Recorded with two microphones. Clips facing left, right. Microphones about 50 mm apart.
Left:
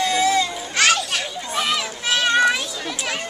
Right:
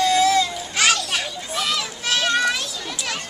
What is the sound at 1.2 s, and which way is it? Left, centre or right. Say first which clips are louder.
Children playing: left 2 dB; centre.